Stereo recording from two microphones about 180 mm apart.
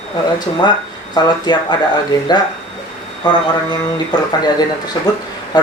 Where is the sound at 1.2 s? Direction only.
20° left (ahead or behind).